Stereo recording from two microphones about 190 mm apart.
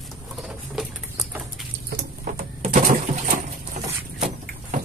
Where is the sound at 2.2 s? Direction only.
40° right (ahead or behind).